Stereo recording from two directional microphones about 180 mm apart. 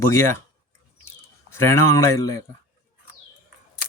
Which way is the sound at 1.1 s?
15° left (ahead or behind).